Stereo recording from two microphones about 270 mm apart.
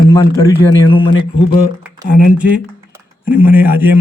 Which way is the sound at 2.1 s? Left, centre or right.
Centre.